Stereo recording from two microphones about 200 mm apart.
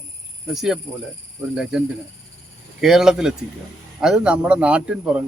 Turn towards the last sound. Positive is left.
turn(degrees=-5)  # may be behind; listen again after turning